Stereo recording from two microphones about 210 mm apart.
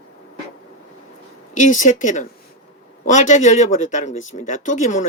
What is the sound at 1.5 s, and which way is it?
Speech, 35° left (ahead or behind).